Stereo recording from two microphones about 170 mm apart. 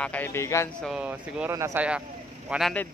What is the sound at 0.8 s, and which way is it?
Speech, 5° right (ahead or behind).